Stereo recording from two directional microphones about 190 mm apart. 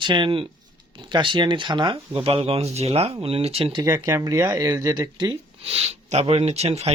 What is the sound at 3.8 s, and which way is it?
Speech, 15° right (ahead or behind).